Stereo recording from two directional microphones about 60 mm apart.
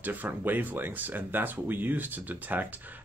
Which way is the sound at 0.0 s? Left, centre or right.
Right.